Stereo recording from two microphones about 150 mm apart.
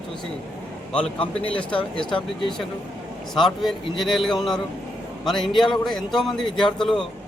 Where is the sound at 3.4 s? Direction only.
Centre (ahead or behind).